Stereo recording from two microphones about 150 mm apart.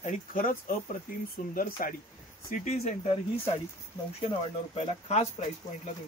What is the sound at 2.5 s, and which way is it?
Speech, 50° left (ahead or behind).